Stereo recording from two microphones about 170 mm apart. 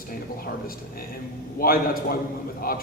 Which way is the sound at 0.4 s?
60° left (ahead or behind).